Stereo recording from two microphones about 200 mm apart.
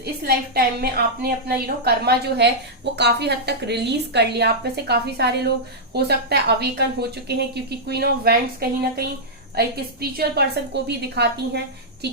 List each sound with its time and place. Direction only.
0.0 s a woman's voice: 50° right (ahead or behind)